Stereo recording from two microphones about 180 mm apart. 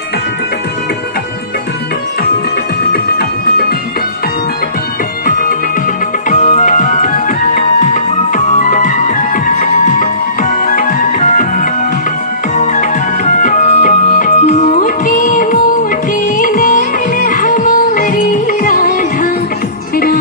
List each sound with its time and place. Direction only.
2.9 s music: 60° left (ahead or behind)
6.3 s music: 45° left (ahead or behind)